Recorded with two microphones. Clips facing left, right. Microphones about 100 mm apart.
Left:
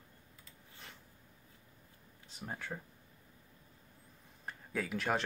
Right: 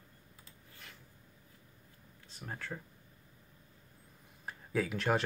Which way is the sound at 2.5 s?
15° left (ahead or behind).